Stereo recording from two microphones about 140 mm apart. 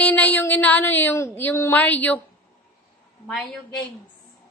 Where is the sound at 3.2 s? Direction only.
5° left (ahead or behind).